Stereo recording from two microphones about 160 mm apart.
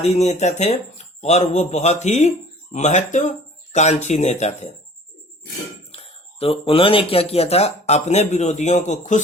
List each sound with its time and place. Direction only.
0.0 s speech: 45° left (ahead or behind)
5.9 s speech: 40° left (ahead or behind)